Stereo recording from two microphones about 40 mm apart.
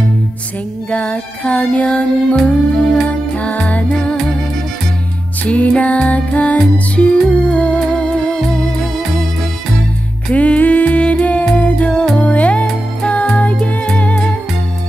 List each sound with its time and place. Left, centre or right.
0.8 s music: left
5.5 s music: left
10.3 s music: left